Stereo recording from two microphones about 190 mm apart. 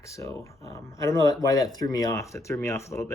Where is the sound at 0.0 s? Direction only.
15° left (ahead or behind).